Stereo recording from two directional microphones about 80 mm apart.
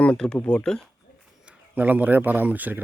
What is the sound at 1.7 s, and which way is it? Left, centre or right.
Speech, centre.